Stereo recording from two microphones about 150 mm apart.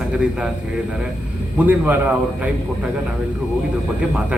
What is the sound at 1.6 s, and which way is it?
Speech, 10° right (ahead or behind).